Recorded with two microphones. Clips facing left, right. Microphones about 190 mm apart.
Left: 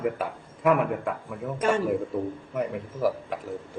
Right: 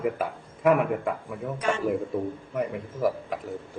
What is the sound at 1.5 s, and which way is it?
Speech, 50° left (ahead or behind).